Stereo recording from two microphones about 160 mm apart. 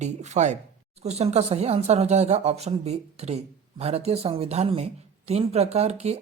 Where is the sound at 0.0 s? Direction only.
45° right (ahead or behind).